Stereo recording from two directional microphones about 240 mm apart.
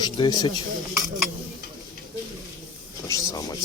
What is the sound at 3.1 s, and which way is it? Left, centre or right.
Speech, centre.